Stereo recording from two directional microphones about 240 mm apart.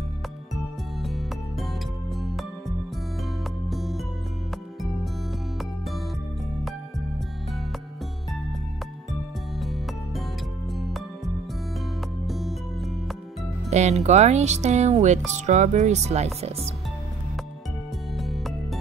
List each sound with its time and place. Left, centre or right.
1.0 s music: centre
3.6 s music: centre
5.6 s music: centre
9.6 s music: centre
13.7 s speech: right
18.1 s music: centre